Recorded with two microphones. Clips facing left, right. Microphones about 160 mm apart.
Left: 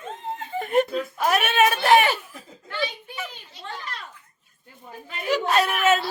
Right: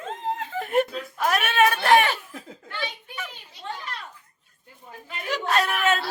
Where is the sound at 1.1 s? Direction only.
5° left (ahead or behind).